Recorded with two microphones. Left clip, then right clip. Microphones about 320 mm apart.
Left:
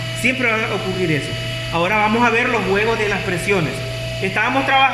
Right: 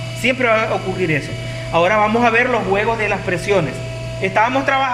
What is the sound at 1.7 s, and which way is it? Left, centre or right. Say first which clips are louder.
Speech: right 3 dB; right.